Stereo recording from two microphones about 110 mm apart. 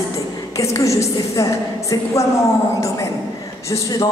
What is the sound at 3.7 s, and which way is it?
Speech, 30° left (ahead or behind).